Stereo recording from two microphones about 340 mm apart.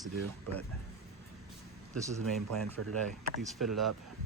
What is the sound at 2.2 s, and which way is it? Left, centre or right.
Speech, right.